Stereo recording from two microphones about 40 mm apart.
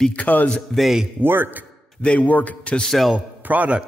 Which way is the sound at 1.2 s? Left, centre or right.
Right.